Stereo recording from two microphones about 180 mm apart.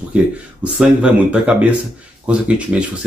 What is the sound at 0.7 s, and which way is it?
Speech, 5° right (ahead or behind).